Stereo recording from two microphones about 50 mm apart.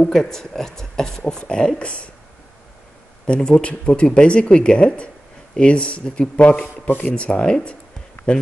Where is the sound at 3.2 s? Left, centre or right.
Centre.